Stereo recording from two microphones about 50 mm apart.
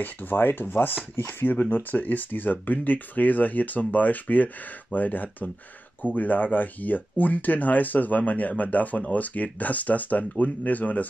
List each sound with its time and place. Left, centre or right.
0.0 s speech: left